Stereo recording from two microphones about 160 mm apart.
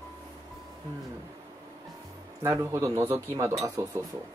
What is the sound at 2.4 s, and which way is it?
Speech, 20° right (ahead or behind).